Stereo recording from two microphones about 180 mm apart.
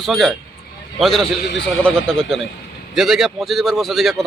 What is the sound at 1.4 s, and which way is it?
Speech, 80° left.